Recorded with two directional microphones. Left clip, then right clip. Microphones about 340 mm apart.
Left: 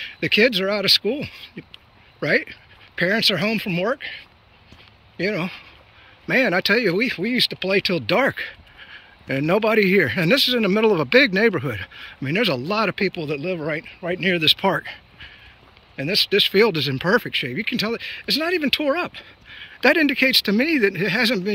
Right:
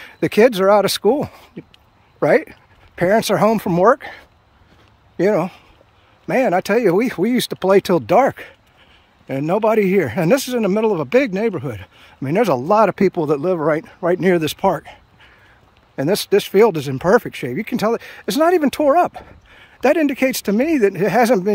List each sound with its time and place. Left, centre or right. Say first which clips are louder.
0.2 s speech: right 4 dB; centre
5.3 s speech: right 8 dB; centre
8.2 s speech: right 5 dB; centre
14.7 s a sound: right 2 dB; centre
16.5 s speech: right 4 dB; centre